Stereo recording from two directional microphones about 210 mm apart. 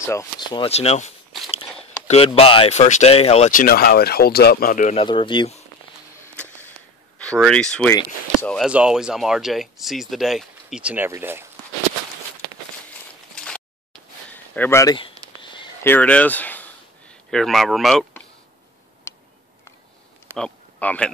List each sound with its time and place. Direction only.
0.0 s speech: 15° left (ahead or behind); by 4.9 s 40° left (ahead or behind)
4.9 s speech: 25° left (ahead or behind)
7.2 s speech: 5° left (ahead or behind)
13.3 s a sound: 5° left (ahead or behind)
15.0 s a sound: 25° left (ahead or behind)
15.8 s speech: 10° left (ahead or behind)
20.3 s speech: 5° left (ahead or behind)